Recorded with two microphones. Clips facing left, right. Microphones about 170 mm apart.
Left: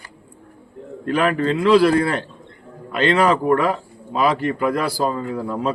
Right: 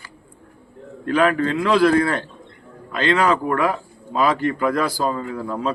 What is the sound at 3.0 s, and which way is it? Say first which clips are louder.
Speech: left 2 dB; 30° left (ahead or behind).